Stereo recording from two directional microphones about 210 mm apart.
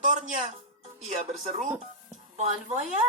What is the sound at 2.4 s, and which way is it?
Speech, 30° right (ahead or behind).